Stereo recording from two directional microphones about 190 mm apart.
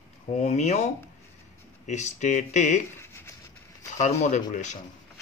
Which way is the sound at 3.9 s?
40° left (ahead or behind).